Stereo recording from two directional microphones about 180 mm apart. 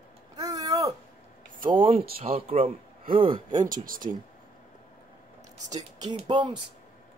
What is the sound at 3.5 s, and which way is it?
Speech, 50° right (ahead or behind).